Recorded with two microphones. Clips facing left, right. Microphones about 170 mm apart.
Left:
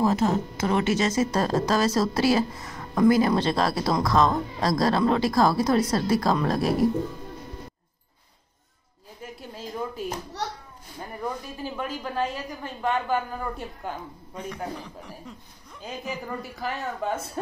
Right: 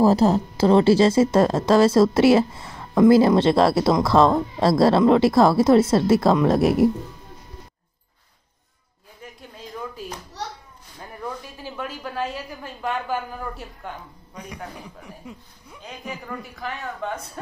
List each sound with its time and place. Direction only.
0.0 s a woman's voice: 35° right (ahead or behind)
11.0 s speech: 10° left (ahead or behind)
11.8 s a woman's voice: 5° right (ahead or behind)
14.3 s a man's voice: 10° right (ahead or behind)